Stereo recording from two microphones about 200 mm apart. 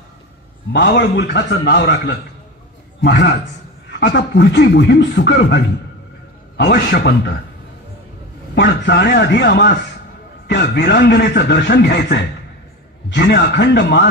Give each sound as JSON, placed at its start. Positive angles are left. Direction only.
{"t": 0.7, "sound": "a man's voice", "side_deg": 55}
{"t": 8.5, "sound": "a man's voice", "side_deg": 55}